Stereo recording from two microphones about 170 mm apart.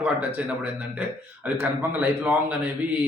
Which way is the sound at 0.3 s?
10° right (ahead or behind).